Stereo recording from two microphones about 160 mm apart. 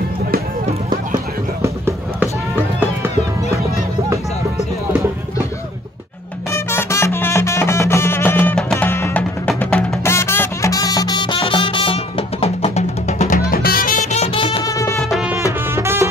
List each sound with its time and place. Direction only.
0.8 s music: 20° right (ahead or behind)
6.5 s music: 15° left (ahead or behind); by 13.4 s 45° left (ahead or behind)
13.5 s music: 65° left (ahead or behind); by 14.6 s 40° left (ahead or behind)
14.6 s music: 20° left (ahead or behind)
15.0 s music: centre (ahead or behind)
15.7 s music: 15° right (ahead or behind)